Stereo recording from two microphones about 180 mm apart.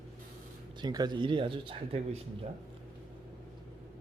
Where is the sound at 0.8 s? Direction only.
20° right (ahead or behind).